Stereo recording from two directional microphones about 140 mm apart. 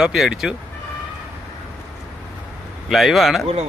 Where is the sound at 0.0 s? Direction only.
Centre (ahead or behind).